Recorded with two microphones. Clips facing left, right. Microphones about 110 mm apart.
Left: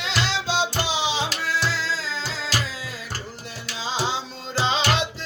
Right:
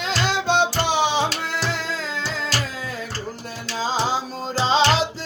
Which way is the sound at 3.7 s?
45° right (ahead or behind).